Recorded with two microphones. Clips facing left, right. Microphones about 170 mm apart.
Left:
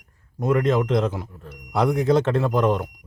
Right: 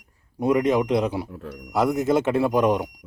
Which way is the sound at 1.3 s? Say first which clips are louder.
Right 6 dB; 70° right (ahead or behind).